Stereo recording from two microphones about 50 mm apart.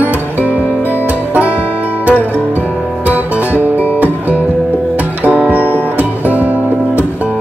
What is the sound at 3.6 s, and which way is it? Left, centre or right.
Music, right.